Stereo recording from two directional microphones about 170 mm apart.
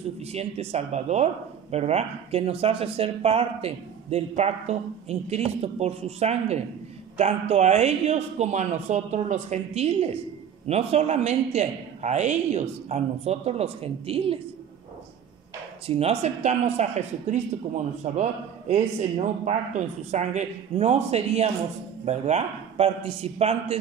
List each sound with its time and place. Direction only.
0.2 s speech: 40° right (ahead or behind)
15.9 s speech: 40° right (ahead or behind)